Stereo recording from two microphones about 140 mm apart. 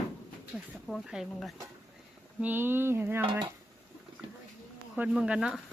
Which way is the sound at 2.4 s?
15° right (ahead or behind).